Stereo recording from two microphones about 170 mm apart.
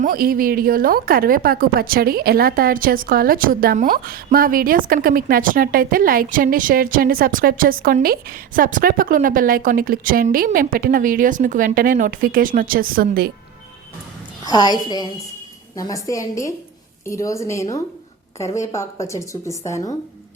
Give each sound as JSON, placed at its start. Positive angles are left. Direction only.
{"t": 0.0, "sound": "a woman's voice", "side_deg": -60}
{"t": 14.4, "sound": "a woman's voice", "side_deg": 25}